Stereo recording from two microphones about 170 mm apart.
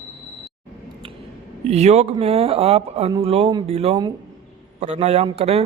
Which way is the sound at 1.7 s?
40° right (ahead or behind).